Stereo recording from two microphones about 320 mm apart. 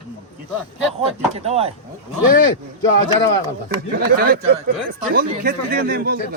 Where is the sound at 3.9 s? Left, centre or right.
Right.